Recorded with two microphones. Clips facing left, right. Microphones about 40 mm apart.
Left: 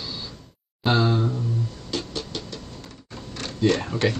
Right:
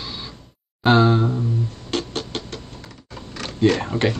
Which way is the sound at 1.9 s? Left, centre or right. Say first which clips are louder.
Right 5 dB; right.